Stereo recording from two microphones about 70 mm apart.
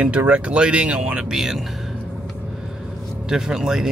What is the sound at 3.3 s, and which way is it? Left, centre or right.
Speech, centre.